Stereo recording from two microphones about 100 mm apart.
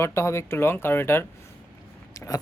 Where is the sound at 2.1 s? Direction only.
35° left (ahead or behind).